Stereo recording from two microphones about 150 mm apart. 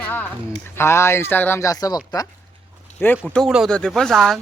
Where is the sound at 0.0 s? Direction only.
10° left (ahead or behind).